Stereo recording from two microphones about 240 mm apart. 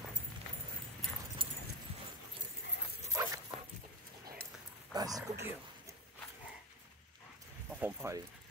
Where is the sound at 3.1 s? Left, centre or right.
Centre.